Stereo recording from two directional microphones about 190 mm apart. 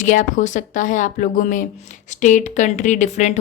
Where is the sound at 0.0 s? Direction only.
45° left (ahead or behind).